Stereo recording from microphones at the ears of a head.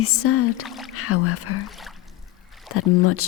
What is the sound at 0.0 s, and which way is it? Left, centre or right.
Speech, left.